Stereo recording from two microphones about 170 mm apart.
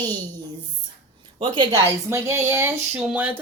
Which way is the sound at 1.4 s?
30° right (ahead or behind).